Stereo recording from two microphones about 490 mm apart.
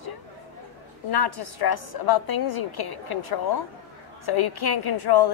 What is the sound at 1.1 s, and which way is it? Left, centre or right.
Speech, left.